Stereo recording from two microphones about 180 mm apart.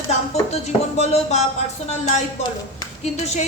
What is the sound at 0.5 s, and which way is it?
Speech, 35° left (ahead or behind).